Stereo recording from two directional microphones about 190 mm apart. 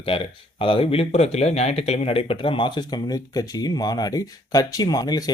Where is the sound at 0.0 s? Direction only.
30° left (ahead or behind).